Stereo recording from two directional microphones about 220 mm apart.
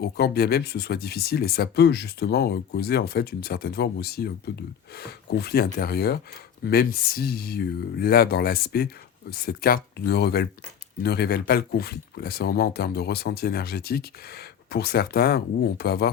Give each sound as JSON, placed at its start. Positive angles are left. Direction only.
{"t": 0.0, "sound": "speech", "side_deg": 45}